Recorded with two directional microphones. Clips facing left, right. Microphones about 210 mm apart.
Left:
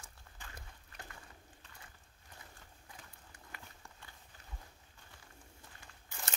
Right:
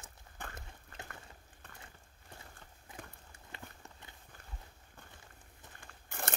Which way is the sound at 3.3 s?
25° right (ahead or behind).